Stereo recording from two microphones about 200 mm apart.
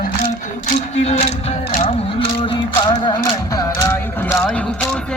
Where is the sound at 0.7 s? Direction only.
35° left (ahead or behind); by 3.9 s 20° left (ahead or behind).